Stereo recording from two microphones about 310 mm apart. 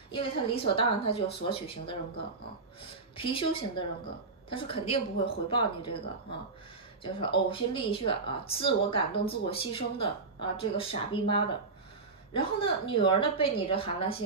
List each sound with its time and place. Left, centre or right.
0.1 s speech: centre